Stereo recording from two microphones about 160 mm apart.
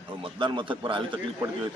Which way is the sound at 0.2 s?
30° right (ahead or behind).